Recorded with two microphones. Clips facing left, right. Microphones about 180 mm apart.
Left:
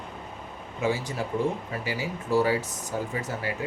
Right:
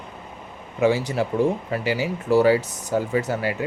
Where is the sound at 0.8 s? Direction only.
75° right (ahead or behind).